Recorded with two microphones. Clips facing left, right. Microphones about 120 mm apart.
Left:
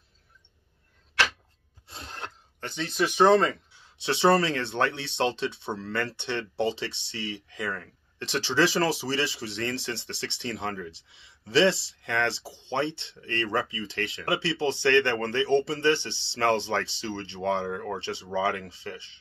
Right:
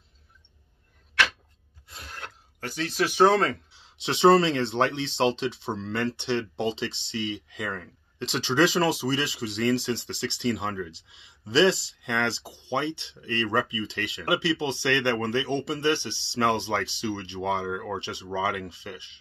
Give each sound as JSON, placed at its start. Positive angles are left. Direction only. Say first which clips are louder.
{"t": 1.9, "sound": "a sound", "louder": "left 2 dB", "side_deg": 25}
{"t": 2.6, "sound": "speech", "louder": "right 1 dB", "side_deg": -5}
{"t": 3.8, "sound": "speech", "louder": "right 3 dB", "side_deg": -20}